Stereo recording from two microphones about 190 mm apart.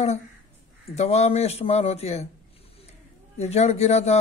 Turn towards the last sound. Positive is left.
turn(degrees=35)  # may be behind; listen again after turning